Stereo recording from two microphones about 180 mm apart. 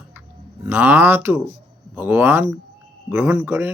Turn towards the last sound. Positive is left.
turn(degrees=-15)  # may be behind; listen again after turning